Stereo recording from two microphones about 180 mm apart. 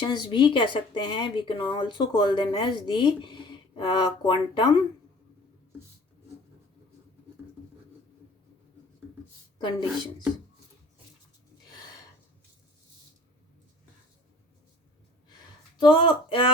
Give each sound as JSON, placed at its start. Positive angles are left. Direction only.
{"t": 0.0, "sound": "speech", "side_deg": 25}
{"t": 9.6, "sound": "speech", "side_deg": 25}
{"t": 15.8, "sound": "speech", "side_deg": 25}